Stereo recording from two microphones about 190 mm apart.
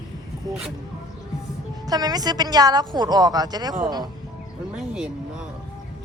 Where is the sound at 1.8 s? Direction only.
20° right (ahead or behind).